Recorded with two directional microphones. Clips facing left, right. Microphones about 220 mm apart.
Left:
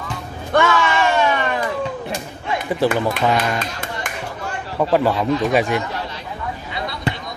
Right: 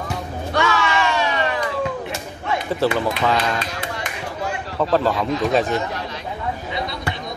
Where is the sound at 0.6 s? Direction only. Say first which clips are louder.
Left 4 dB; 50° left (ahead or behind).